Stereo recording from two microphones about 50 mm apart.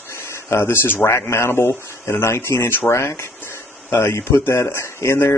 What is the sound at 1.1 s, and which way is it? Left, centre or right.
Speech, left.